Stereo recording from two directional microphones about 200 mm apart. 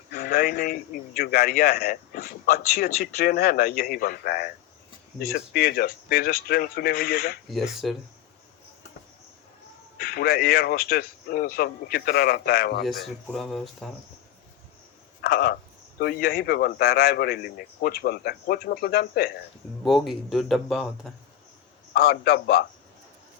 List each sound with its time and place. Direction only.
0.1 s a man's voice: 50° left (ahead or behind)
7.4 s speech: centre (ahead or behind)
10.0 s a man's voice: 50° left (ahead or behind)
12.8 s speech: centre (ahead or behind)
15.2 s a man's voice: 50° left (ahead or behind)
19.8 s speech: centre (ahead or behind)
21.9 s a man's voice: 50° left (ahead or behind)